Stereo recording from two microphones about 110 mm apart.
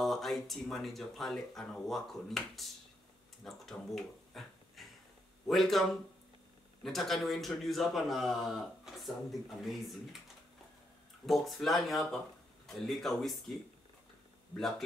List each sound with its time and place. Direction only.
0.0 s a man's voice: centre (ahead or behind)
11.2 s a man's voice: centre (ahead or behind)